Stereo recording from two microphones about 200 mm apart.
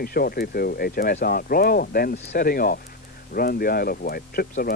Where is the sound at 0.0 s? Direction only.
50° left (ahead or behind).